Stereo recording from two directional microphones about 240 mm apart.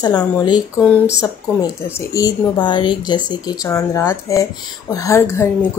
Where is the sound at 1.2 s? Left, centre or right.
Centre.